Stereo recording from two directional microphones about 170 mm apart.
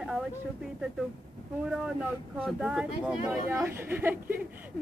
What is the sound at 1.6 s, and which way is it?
Speech, 5° right (ahead or behind).